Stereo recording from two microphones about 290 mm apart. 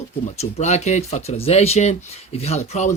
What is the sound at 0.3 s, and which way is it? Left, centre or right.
Speech, left.